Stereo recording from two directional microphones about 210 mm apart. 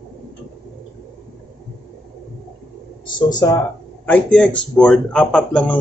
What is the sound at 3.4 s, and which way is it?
Speech, 15° left (ahead or behind).